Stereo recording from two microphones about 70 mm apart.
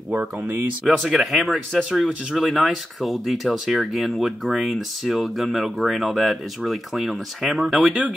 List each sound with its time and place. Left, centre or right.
0.1 s speech: right
0.8 s speech: centre